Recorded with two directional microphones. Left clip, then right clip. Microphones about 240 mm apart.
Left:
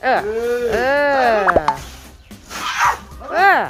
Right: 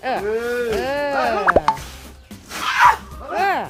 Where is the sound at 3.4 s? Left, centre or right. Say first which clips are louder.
Left 7 dB; centre.